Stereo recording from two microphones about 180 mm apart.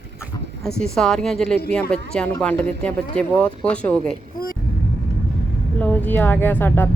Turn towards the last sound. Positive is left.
turn(degrees=10)  # may be behind; listen again after turning